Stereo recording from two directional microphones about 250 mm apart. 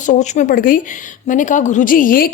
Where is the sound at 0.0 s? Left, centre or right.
Left.